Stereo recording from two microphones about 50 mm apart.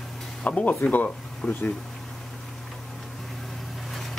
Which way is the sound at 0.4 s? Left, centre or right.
Left.